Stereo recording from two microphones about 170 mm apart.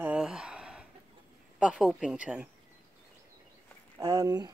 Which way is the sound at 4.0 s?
20° right (ahead or behind).